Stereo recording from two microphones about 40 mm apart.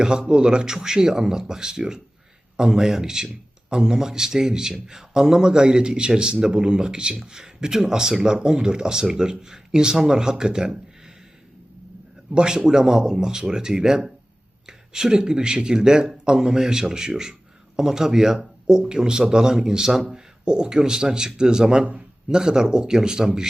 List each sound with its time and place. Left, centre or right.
0.0 s speech: right
12.3 s speech: right